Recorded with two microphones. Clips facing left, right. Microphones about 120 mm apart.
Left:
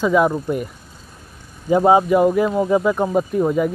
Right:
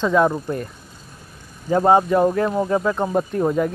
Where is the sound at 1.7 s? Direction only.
10° left (ahead or behind).